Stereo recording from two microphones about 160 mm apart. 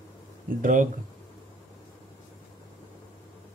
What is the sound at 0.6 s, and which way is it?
Speech, 60° right (ahead or behind).